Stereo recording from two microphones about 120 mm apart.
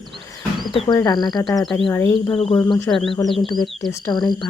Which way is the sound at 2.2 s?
45° left (ahead or behind).